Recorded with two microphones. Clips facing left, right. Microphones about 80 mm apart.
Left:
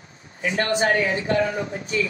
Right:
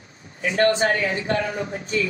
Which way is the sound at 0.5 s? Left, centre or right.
Right.